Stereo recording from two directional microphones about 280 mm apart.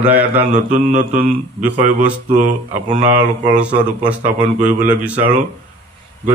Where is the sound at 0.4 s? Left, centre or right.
Right.